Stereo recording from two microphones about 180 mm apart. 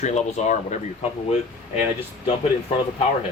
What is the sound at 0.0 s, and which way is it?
Speech, 40° left (ahead or behind).